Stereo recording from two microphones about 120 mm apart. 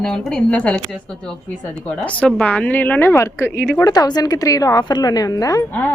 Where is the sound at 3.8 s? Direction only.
35° left (ahead or behind).